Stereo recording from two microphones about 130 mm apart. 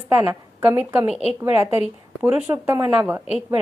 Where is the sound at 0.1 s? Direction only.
15° right (ahead or behind).